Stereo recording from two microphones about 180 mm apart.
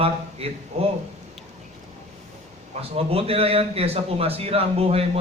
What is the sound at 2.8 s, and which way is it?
A man's voice, 35° right (ahead or behind).